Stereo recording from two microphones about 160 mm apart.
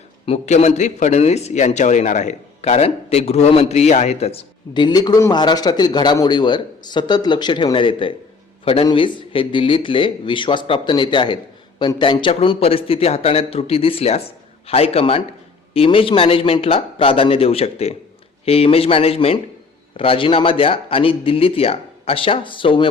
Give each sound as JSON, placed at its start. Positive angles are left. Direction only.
{"t": 0.3, "sound": "a man's voice", "side_deg": 45}